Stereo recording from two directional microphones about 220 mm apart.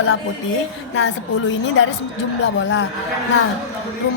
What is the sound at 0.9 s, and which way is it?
A woman's voice, 55° left (ahead or behind).